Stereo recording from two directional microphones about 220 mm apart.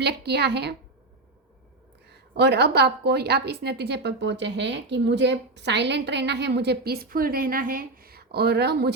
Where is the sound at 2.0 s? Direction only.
50° right (ahead or behind).